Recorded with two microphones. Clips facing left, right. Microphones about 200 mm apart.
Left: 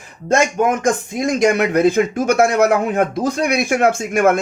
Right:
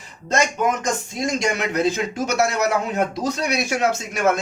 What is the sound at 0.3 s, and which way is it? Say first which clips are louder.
Speech: left 5 dB; 50° left (ahead or behind).